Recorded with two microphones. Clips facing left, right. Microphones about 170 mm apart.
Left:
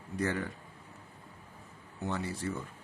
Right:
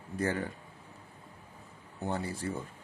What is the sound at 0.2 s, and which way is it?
Speech, 30° right (ahead or behind).